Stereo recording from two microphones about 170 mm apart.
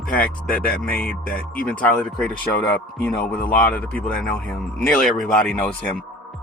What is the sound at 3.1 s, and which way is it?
Speech, 60° left (ahead or behind).